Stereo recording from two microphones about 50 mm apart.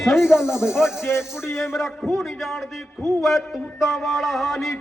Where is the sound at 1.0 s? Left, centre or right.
Left.